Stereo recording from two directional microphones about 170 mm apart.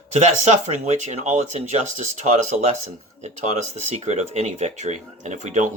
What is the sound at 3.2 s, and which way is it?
Speech, 40° right (ahead or behind).